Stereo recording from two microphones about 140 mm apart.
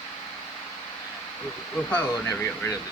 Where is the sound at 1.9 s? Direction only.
20° left (ahead or behind).